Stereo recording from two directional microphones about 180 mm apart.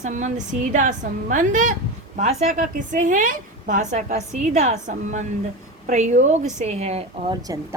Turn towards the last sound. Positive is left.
turn(degrees=-20)  # may be behind; listen again after turning